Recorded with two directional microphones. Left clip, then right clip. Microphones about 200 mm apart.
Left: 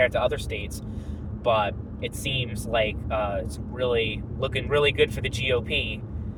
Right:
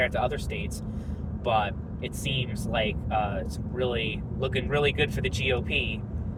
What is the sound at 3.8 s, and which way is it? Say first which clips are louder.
Speech: left 4 dB; 30° left (ahead or behind).